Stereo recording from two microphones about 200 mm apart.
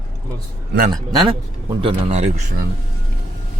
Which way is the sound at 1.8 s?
30° right (ahead or behind).